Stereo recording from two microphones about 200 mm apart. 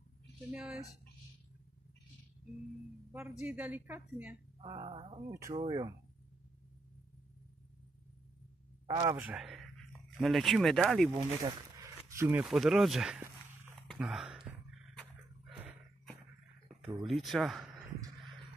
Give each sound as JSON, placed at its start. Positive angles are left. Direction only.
{"t": 0.5, "sound": "speech", "side_deg": -5}
{"t": 3.1, "sound": "a woman's voice", "side_deg": -10}
{"t": 4.6, "sound": "a sound", "side_deg": -25}
{"t": 5.3, "sound": "a woman's voice", "side_deg": -15}
{"t": 8.8, "sound": "speech", "side_deg": -20}
{"t": 9.2, "sound": "speech", "side_deg": -5}
{"t": 11.1, "sound": "speech", "side_deg": -20}
{"t": 13.8, "sound": "a sound", "side_deg": 0}
{"t": 17.1, "sound": "speech", "side_deg": 0}